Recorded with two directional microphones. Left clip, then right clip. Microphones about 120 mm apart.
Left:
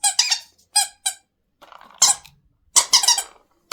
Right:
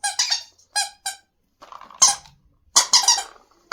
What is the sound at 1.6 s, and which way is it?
Squeak, 5° right (ahead or behind).